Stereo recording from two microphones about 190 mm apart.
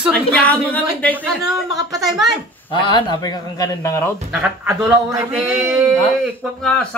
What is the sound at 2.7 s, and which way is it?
A man's voice, 25° left (ahead or behind).